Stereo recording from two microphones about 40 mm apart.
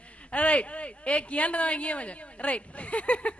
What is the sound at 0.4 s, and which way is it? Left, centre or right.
A woman's voice, left.